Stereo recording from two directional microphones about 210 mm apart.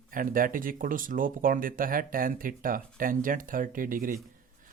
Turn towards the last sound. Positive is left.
turn(degrees=-40)  # may be behind; listen again after turning